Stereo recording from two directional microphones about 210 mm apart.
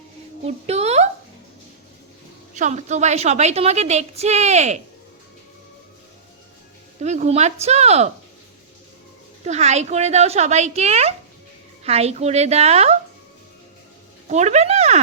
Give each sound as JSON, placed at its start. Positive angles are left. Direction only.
{"t": 0.4, "sound": "a woman's voice", "side_deg": -30}
{"t": 2.6, "sound": "a woman's voice", "side_deg": -35}
{"t": 7.0, "sound": "a woman's voice", "side_deg": -35}
{"t": 9.4, "sound": "a woman's voice", "side_deg": -30}
{"t": 14.3, "sound": "speech", "side_deg": -35}